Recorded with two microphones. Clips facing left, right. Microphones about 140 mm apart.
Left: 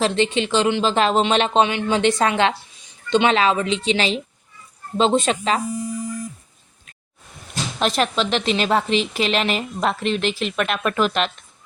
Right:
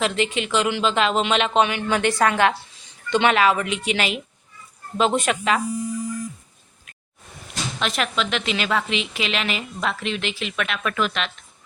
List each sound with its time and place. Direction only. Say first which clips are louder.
0.0 s a woman's voice: left 3 dB; 30° left (ahead or behind)
7.8 s a woman's voice: left 5 dB; 35° left (ahead or behind)